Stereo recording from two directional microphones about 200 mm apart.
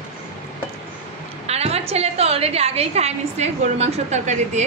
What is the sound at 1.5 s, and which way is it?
A woman's voice, 30° right (ahead or behind).